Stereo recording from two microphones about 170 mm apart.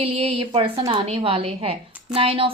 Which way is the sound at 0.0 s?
35° right (ahead or behind).